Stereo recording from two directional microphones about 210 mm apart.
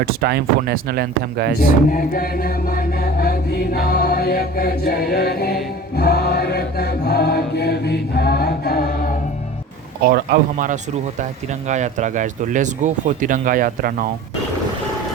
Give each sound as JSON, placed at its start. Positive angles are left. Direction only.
{"t": 0.0, "sound": "speech", "side_deg": -45}
{"t": 1.9, "sound": "chant", "side_deg": 40}
{"t": 6.0, "sound": "mantra", "side_deg": 50}
{"t": 10.0, "sound": "speech", "side_deg": -45}